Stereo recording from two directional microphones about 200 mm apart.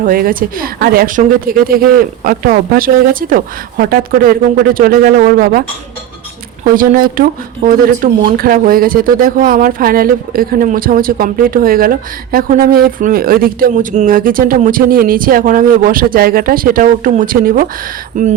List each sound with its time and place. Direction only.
0.0 s speech: 45° right (ahead or behind)
6.7 s speech: 45° right (ahead or behind)
18.1 s a sound: 35° right (ahead or behind)